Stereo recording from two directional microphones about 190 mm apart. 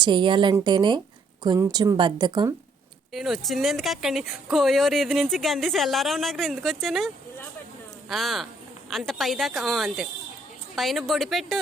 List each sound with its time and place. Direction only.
0.0 s a woman's voice: 25° right (ahead or behind)
3.1 s speech: centre (ahead or behind)
8.1 s speech: centre (ahead or behind)